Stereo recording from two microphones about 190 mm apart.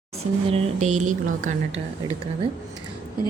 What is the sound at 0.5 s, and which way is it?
Speech, 40° right (ahead or behind).